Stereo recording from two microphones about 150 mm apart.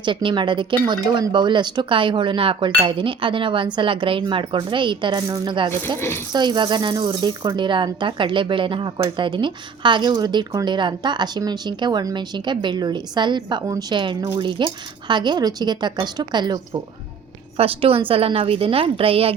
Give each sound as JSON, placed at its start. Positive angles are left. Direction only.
{"t": 0.0, "sound": "speech", "side_deg": -35}
{"t": 6.0, "sound": "speech", "side_deg": 15}
{"t": 6.3, "sound": "a woman's voice", "side_deg": -30}
{"t": 17.6, "sound": "speech", "side_deg": -40}